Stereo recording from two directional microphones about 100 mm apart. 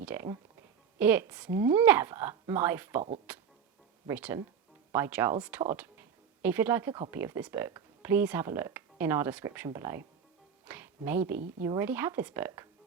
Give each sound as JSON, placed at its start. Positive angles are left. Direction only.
{"t": 0.0, "sound": "music", "side_deg": -20}
{"t": 0.9, "sound": "speech", "side_deg": -20}
{"t": 1.5, "sound": "speech", "side_deg": -30}
{"t": 1.8, "sound": "speech", "side_deg": -20}
{"t": 5.7, "sound": "a sound", "side_deg": -20}
{"t": 7.1, "sound": "speech", "side_deg": -25}